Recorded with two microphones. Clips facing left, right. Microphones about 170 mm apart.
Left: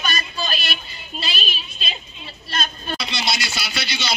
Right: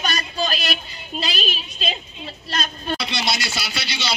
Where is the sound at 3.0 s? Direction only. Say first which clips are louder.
Right 1 dB; 55° right (ahead or behind); by 4.1 s 35° right (ahead or behind).